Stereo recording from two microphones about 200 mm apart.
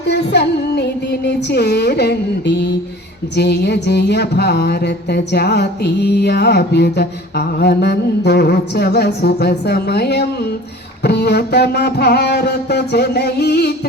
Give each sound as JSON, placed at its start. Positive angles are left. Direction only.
{"t": 0.1, "sound": "music", "side_deg": 55}